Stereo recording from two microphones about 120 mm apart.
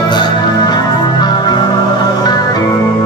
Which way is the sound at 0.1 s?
35° left (ahead or behind).